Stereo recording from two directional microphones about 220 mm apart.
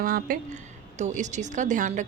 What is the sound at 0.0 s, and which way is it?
Speech, 40° right (ahead or behind).